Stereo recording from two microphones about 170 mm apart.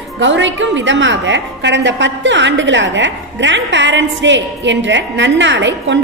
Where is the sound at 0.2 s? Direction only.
90° right.